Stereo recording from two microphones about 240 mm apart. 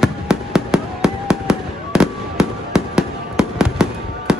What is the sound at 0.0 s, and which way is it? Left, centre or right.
Fireworks, centre.